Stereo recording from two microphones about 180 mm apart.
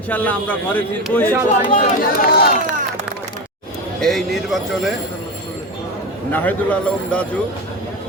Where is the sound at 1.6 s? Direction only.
45° left (ahead or behind).